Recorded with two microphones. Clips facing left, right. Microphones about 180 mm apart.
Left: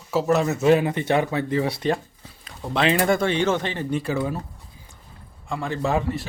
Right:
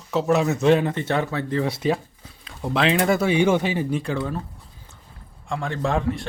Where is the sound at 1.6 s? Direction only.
Centre (ahead or behind).